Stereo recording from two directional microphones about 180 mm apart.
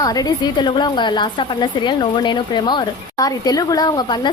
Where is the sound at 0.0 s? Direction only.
20° left (ahead or behind).